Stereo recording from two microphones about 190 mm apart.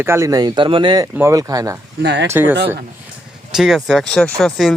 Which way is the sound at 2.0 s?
65° right (ahead or behind).